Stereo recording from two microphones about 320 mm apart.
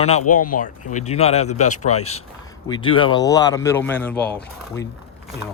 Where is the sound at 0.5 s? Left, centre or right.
Left; by 4.3 s centre.